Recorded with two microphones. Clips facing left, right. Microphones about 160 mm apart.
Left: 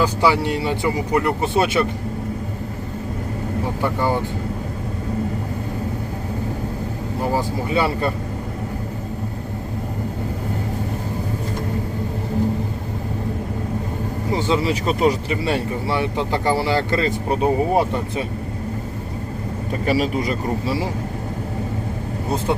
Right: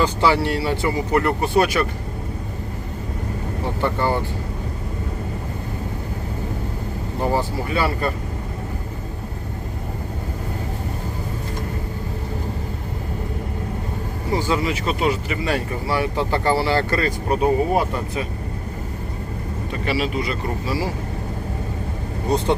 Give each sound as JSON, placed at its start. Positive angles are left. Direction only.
{"t": 0.0, "sound": "speech", "side_deg": 10}
{"t": 3.8, "sound": "speech", "side_deg": 10}
{"t": 7.7, "sound": "speech", "side_deg": 25}
{"t": 14.3, "sound": "speech", "side_deg": 25}
{"t": 19.8, "sound": "speech", "side_deg": 40}
{"t": 20.7, "sound": "speech", "side_deg": 25}